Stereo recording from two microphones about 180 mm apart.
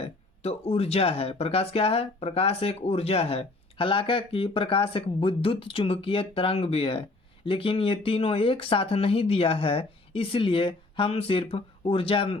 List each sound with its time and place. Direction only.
0.4 s speech: 35° left (ahead or behind)